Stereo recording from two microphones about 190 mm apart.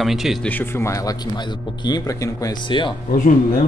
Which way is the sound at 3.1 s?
45° left (ahead or behind).